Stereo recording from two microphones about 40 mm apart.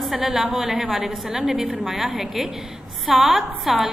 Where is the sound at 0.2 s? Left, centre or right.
Centre.